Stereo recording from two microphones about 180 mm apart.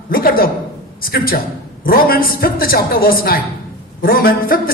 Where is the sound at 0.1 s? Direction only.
55° left (ahead or behind).